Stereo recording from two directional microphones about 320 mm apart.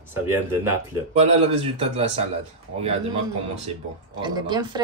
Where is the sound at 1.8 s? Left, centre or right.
Centre.